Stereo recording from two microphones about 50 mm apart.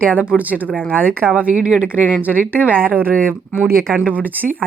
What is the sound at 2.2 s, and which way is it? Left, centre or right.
A woman's voice, right.